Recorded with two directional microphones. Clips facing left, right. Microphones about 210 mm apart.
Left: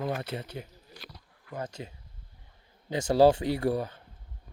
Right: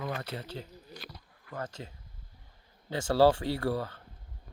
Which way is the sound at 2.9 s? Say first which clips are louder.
Left 3 dB; 15° left (ahead or behind).